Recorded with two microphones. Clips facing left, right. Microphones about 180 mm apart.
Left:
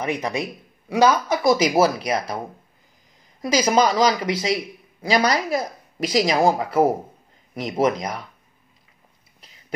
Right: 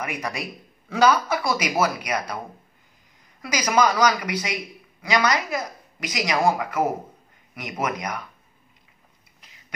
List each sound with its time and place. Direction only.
0.0 s speech: 25° left (ahead or behind)
3.4 s speech: 30° left (ahead or behind)